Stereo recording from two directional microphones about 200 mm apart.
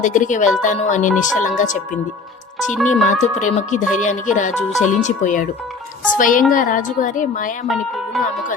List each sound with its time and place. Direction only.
0.0 s speech: 40° left (ahead or behind)
2.7 s speech: 5° left (ahead or behind)
3.0 s a woman's voice: 35° left (ahead or behind)